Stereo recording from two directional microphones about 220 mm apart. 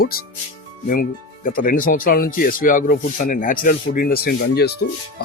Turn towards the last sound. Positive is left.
turn(degrees=45)  # may be behind; listen again after turning